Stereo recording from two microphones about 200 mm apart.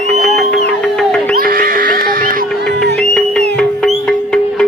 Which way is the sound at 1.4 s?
45° right (ahead or behind).